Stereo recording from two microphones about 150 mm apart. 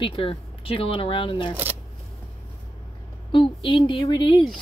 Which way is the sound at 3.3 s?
35° left (ahead or behind).